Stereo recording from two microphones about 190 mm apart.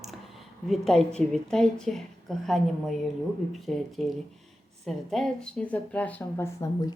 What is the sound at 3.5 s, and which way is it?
A woman's voice, centre (ahead or behind).